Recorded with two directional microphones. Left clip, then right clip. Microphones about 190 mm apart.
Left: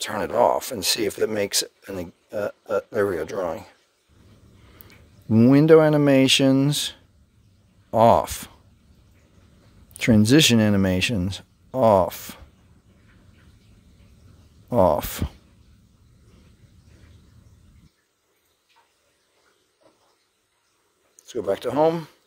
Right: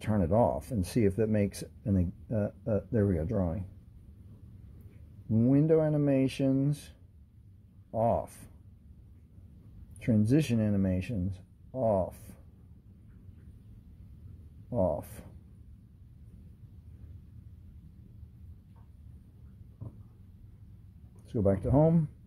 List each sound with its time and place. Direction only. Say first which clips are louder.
0.0 s speech: left 8 dB; 45° left (ahead or behind)
5.4 s speech: left 12 dB; 40° left (ahead or behind)
9.9 s speech: left 12 dB; 40° left (ahead or behind)
14.7 s speech: left 12 dB; 65° left (ahead or behind)
21.3 s speech: left 4 dB; 40° left (ahead or behind)